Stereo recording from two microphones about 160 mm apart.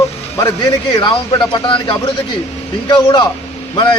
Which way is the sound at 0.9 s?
25° left (ahead or behind).